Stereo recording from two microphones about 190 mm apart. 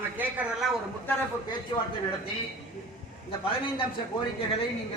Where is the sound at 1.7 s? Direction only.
25° left (ahead or behind).